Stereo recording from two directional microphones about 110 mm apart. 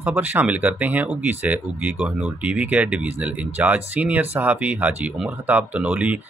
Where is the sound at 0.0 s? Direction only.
15° right (ahead or behind).